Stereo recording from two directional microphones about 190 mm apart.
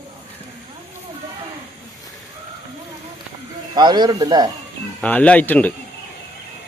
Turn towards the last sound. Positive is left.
turn(degrees=10)  # may be behind; listen again after turning